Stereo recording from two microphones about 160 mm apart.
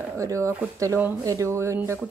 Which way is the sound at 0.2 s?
20° right (ahead or behind).